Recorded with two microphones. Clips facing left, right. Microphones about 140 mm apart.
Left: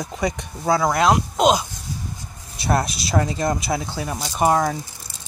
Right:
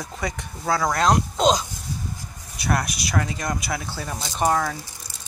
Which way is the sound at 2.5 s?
25° left (ahead or behind).